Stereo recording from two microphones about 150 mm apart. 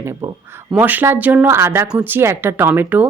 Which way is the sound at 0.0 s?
20° right (ahead or behind).